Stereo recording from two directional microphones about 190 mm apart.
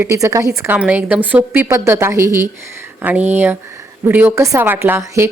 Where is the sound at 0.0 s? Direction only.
15° right (ahead or behind).